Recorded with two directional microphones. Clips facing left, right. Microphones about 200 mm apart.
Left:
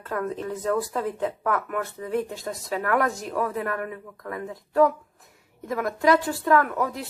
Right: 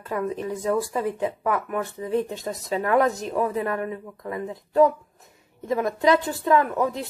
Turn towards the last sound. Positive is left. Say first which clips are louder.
# right 1 dB
turn(degrees=-20)  # may be behind; listen again after turning